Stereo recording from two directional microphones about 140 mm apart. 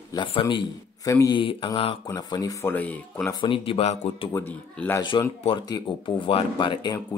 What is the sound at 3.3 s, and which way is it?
Speech, 35° left (ahead or behind).